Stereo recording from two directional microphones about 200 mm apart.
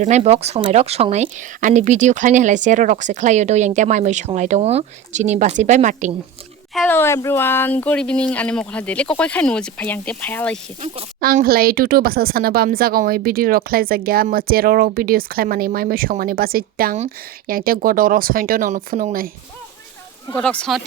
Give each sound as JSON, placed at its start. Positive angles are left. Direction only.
{"t": 0.0, "sound": "a woman's voice", "side_deg": -35}
{"t": 6.7, "sound": "speech", "side_deg": 10}
{"t": 11.2, "sound": "speech", "side_deg": -50}
{"t": 20.3, "sound": "speech", "side_deg": 5}